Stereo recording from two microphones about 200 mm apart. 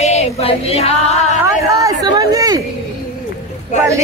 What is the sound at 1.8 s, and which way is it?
Speech, 20° right (ahead or behind).